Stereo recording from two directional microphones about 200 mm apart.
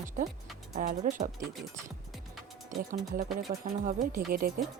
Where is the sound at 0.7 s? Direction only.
40° right (ahead or behind).